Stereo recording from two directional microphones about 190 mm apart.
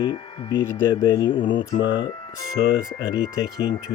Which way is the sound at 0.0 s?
20° left (ahead or behind).